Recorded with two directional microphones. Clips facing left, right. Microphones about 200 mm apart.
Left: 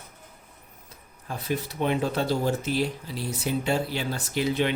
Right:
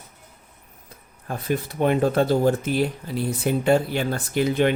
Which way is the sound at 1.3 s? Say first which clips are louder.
Right 4 dB; 50° right (ahead or behind).